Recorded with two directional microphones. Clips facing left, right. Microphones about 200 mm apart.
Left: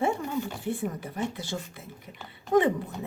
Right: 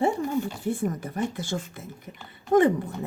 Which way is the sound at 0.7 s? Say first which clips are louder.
Right 5 dB; 45° right (ahead or behind).